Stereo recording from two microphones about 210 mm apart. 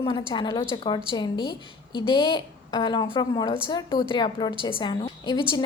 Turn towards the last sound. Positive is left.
turn(degrees=20)  # may be behind; listen again after turning